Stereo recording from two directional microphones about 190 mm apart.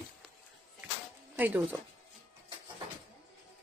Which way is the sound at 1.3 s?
10° right (ahead or behind).